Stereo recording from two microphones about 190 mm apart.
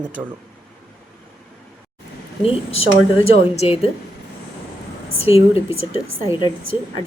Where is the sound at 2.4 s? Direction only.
30° left (ahead or behind).